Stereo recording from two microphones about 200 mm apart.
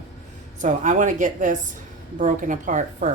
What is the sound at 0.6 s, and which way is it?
A woman's voice, 40° right (ahead or behind).